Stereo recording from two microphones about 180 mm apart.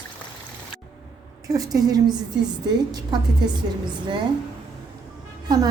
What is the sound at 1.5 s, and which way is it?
Speech, 20° right (ahead or behind).